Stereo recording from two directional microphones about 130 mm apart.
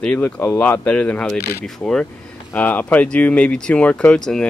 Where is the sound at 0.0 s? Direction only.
10° left (ahead or behind).